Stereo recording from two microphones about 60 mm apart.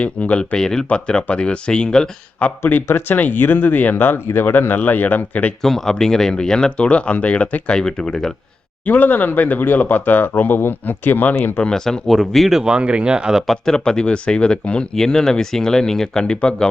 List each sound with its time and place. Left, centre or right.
0.0 s speech: left
2.6 s speech: left
5.6 s speech: centre; by 7.6 s left
7.7 s speech: centre
8.8 s speech: left
11.6 s speech: centre
13.5 s speech: centre